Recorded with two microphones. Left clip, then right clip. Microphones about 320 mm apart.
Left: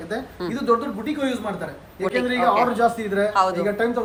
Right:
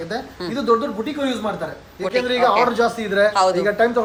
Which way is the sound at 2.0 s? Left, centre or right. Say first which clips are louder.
Right 3 dB; centre.